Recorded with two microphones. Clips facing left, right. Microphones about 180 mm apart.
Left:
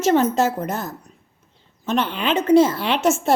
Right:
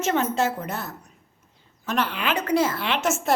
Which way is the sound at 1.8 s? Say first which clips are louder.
Left 4 dB; 25° left (ahead or behind).